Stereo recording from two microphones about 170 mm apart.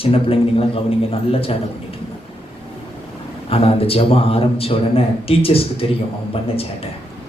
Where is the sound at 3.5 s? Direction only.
35° left (ahead or behind).